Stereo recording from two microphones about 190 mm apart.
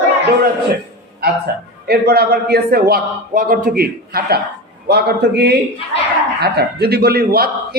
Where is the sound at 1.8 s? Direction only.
55° right (ahead or behind).